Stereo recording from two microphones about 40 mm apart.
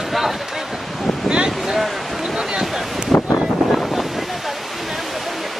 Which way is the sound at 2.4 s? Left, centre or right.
Centre.